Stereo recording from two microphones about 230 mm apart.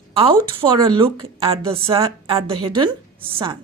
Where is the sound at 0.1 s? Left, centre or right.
Right.